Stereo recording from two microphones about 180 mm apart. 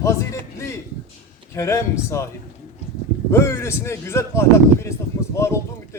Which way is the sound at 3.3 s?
15° left (ahead or behind).